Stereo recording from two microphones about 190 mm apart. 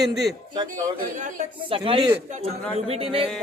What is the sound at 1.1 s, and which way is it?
Speech, 40° right (ahead or behind).